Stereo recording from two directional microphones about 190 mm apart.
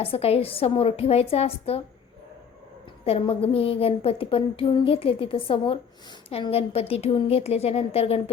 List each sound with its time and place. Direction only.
0.0 s a woman's voice: 30° left (ahead or behind)
3.0 s a woman's voice: 30° left (ahead or behind)